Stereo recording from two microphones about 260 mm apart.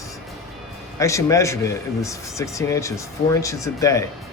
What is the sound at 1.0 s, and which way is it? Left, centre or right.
A man's voice, centre.